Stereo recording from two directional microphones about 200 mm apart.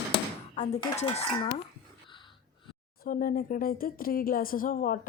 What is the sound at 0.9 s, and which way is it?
Speech, 30° left (ahead or behind).